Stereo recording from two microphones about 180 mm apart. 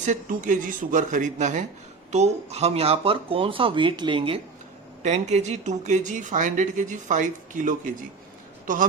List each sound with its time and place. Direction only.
0.0 s speech: 45° right (ahead or behind); by 4.4 s 30° right (ahead or behind)
5.0 s a man's voice: 40° right (ahead or behind)